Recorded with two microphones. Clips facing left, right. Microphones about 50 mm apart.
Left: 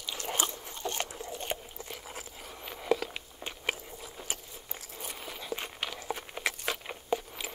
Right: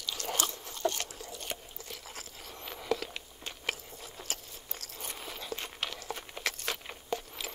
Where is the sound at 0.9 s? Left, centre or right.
Left.